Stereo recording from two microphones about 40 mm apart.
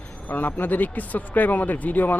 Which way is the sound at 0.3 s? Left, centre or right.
Left.